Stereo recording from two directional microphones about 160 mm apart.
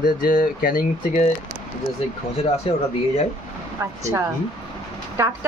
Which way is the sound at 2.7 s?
35° left (ahead or behind).